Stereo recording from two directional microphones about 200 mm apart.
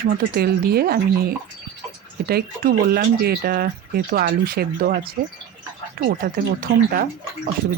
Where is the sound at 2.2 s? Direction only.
50° right (ahead or behind).